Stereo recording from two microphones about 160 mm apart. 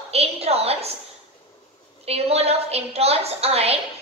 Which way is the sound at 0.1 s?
40° right (ahead or behind).